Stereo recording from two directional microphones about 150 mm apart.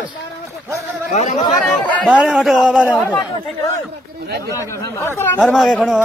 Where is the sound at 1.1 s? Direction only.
45° left (ahead or behind).